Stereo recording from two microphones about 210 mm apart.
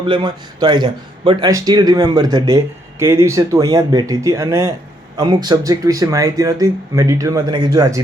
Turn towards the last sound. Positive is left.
turn(degrees=-15)  # may be behind; listen again after turning